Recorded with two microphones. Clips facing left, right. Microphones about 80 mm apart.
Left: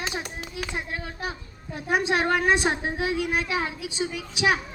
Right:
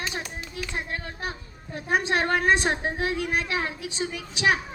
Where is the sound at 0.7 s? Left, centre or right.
Centre.